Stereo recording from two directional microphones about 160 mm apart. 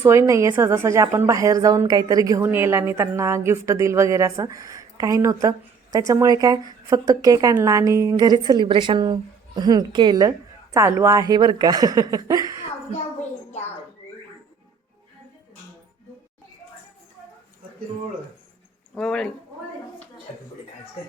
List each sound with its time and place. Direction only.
0.0 s a woman's voice: 15° right (ahead or behind)
13.5 s bird: 45° left (ahead or behind)
18.9 s speech: 5° left (ahead or behind)